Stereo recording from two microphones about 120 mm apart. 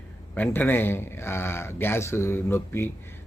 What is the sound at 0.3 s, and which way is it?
Speech, 15° left (ahead or behind).